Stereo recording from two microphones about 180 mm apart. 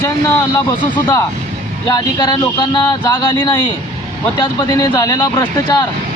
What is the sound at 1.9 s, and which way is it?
Speech, 25° left (ahead or behind).